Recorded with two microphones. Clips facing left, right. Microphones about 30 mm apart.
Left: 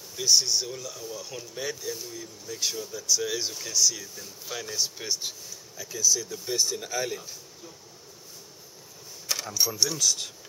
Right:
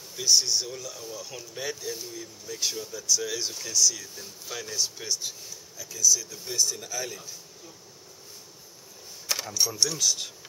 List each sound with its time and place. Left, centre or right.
0.1 s speech: centre
6.5 s speech: left
9.5 s speech: centre